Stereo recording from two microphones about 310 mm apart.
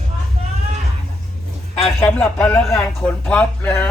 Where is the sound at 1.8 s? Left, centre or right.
Centre.